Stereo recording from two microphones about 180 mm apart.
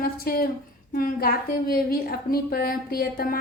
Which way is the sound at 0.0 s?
55° left (ahead or behind).